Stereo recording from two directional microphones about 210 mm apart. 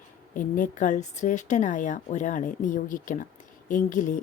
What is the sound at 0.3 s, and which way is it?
A woman's voice, 40° left (ahead or behind).